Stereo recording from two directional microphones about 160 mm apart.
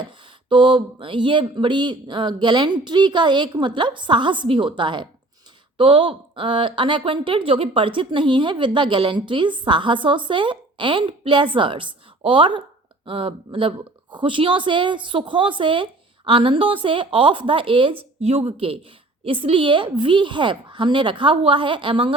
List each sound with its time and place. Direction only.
0.0 s speech: 30° right (ahead or behind)